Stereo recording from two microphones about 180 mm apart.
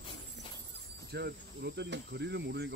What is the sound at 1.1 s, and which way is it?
Cricket, 65° right (ahead or behind).